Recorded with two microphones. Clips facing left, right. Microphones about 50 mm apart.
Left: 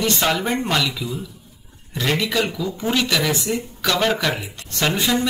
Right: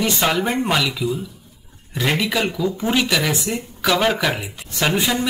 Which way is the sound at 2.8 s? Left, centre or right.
Centre.